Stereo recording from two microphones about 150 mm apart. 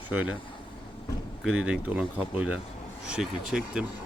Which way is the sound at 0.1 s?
10° right (ahead or behind).